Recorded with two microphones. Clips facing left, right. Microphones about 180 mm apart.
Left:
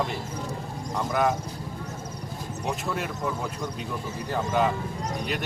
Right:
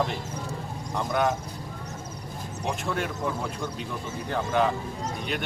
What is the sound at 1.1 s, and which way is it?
Speech, centre (ahead or behind).